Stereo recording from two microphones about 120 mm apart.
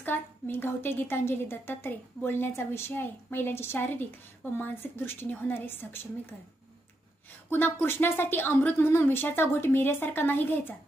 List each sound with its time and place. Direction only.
0.0 s a woman's voice: 15° left (ahead or behind)
7.5 s a woman's voice: 20° left (ahead or behind)